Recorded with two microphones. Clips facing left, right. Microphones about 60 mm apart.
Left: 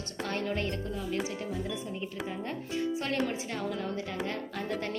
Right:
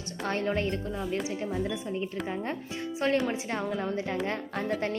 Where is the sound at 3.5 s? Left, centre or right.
Right.